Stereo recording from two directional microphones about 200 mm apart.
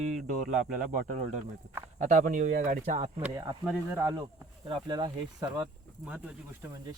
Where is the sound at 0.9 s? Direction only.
40° right (ahead or behind).